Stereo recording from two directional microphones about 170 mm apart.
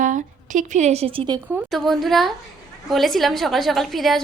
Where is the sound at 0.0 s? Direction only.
45° right (ahead or behind); by 1.4 s 30° right (ahead or behind).